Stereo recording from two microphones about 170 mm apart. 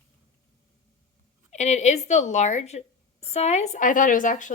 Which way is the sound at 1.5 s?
40° left (ahead or behind).